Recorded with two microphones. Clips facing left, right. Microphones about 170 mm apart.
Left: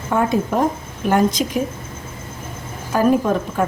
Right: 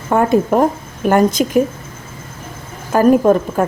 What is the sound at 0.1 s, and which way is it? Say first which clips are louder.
A woman's voice: right 5 dB; 50° right (ahead or behind).